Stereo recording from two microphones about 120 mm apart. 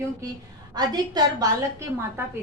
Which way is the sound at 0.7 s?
35° right (ahead or behind).